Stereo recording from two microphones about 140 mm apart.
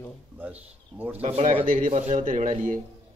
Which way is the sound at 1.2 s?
50° right (ahead or behind).